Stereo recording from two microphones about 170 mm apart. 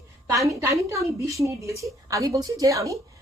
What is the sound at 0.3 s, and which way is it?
A woman's voice, 20° right (ahead or behind).